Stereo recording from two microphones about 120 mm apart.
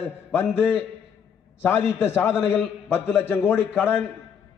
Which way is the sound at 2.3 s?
Centre (ahead or behind).